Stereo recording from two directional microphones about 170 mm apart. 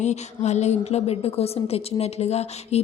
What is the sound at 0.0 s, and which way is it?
Speech, 40° left (ahead or behind).